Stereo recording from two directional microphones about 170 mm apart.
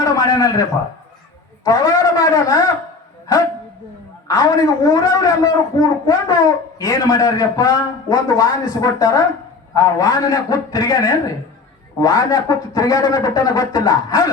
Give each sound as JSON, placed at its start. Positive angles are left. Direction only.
{"t": 0.0, "sound": "a sound", "side_deg": 20}
{"t": 1.6, "sound": "a man's voice", "side_deg": 20}
{"t": 4.3, "sound": "a man's voice", "side_deg": 20}